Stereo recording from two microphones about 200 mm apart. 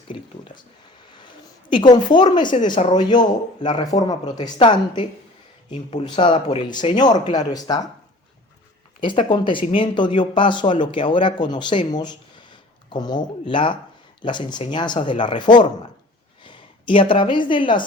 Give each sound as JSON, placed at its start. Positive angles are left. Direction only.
{"t": 0.1, "sound": "speech", "side_deg": 25}
{"t": 1.7, "sound": "speech", "side_deg": 20}
{"t": 9.0, "sound": "speech", "side_deg": 25}
{"t": 16.4, "sound": "a sound", "side_deg": 25}
{"t": 17.5, "sound": "speech", "side_deg": 25}